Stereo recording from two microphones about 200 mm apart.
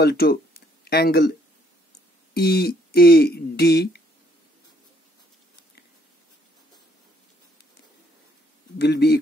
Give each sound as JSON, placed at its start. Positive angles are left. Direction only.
{"t": 0.0, "sound": "speech", "side_deg": 50}
{"t": 2.3, "sound": "speech", "side_deg": 50}
{"t": 8.7, "sound": "speech", "side_deg": 55}